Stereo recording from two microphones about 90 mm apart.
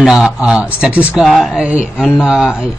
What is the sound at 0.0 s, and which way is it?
Speech, 5° right (ahead or behind).